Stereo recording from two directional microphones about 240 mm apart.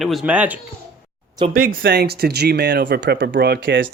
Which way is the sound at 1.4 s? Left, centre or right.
Right.